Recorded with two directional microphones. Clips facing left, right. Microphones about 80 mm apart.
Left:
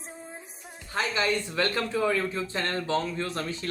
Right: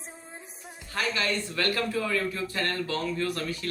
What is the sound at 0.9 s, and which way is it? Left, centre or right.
Speech, left.